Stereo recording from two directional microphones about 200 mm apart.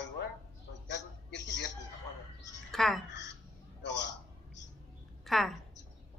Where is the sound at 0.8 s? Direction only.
60° left (ahead or behind).